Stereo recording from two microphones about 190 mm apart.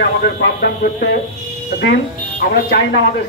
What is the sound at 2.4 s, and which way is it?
Speech, 55° left (ahead or behind).